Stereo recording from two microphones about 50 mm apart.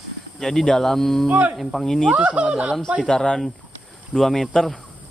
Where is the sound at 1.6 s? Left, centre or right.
Centre.